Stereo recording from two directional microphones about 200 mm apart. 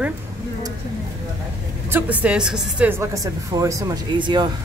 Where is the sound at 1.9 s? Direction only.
10° right (ahead or behind).